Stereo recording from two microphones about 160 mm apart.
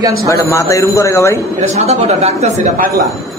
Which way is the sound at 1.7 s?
40° right (ahead or behind).